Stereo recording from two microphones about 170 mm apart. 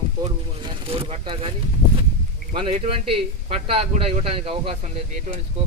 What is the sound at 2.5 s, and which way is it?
Speech, 30° right (ahead or behind).